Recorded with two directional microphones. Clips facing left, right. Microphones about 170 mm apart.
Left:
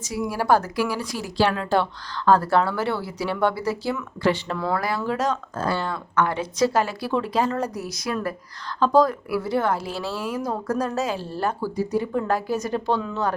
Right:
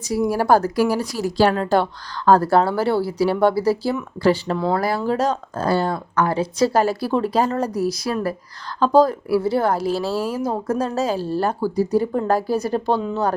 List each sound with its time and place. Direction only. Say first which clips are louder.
0.0 s speech: right 6 dB; 35° right (ahead or behind)